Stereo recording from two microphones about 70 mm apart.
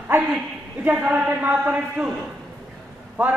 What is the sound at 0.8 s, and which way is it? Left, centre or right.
Speech, right.